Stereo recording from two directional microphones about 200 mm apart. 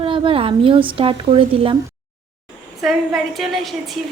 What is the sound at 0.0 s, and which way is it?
A woman's voice, 25° right (ahead or behind).